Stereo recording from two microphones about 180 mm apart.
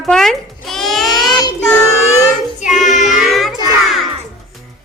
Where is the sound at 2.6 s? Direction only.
45° left (ahead or behind).